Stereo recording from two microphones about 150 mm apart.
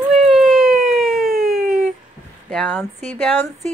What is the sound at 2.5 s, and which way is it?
Speech, 5° left (ahead or behind).